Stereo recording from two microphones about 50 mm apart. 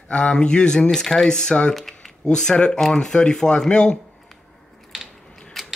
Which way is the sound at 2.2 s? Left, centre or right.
Centre.